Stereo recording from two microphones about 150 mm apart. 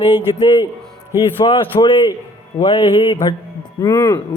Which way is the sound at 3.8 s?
20° left (ahead or behind).